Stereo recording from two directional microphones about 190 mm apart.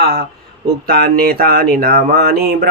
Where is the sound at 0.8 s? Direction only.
55° right (ahead or behind).